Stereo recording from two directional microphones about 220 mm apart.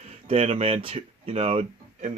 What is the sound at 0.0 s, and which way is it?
Speech, 30° right (ahead or behind).